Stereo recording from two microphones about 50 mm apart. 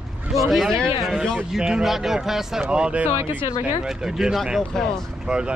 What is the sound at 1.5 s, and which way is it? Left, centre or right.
Speech, centre.